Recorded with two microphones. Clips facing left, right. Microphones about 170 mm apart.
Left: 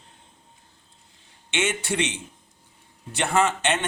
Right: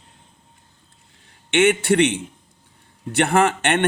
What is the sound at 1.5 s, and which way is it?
Speech, 60° right (ahead or behind).